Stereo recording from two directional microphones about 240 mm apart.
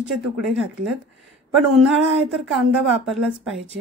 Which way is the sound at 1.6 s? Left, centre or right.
Centre.